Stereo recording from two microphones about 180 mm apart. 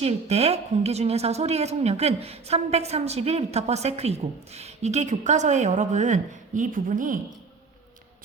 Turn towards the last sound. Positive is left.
turn(degrees=-45)  # may be behind; listen again after turning